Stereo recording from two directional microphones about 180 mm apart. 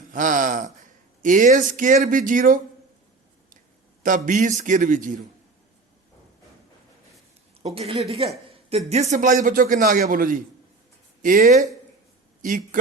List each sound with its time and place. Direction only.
0.1 s speech: 45° right (ahead or behind)
4.0 s speech: 45° right (ahead or behind)
7.6 s a woman's voice: 35° right (ahead or behind)